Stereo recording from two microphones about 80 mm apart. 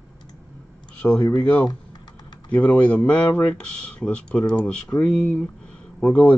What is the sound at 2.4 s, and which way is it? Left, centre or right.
Speech, centre.